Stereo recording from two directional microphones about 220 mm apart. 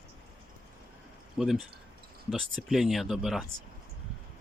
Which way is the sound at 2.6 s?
Centre (ahead or behind).